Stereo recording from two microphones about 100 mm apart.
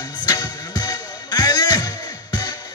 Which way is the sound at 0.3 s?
45° left (ahead or behind).